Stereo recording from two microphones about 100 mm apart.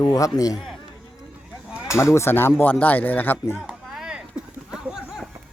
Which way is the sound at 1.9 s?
30° left (ahead or behind).